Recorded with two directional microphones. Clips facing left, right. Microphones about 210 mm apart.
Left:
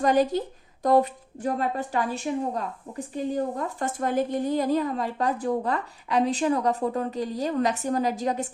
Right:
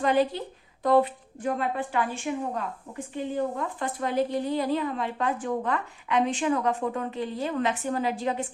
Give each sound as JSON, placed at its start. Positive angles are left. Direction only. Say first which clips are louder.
{"t": 0.0, "sound": "speech", "louder": "left 2 dB", "side_deg": 40}